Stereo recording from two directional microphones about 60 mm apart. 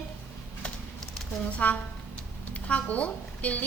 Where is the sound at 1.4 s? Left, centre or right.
Left.